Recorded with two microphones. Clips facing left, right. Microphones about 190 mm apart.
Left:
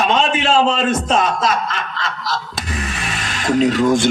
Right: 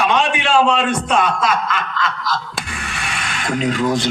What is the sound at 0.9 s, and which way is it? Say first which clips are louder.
Speech: left 1 dB; 25° left (ahead or behind).